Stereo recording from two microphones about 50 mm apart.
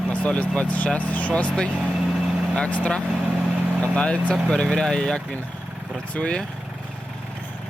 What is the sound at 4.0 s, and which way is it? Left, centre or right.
Speech, left.